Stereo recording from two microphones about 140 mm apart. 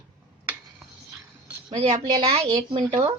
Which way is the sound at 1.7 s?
35° right (ahead or behind).